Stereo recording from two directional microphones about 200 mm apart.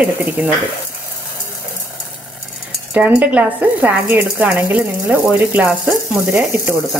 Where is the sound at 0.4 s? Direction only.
10° right (ahead or behind).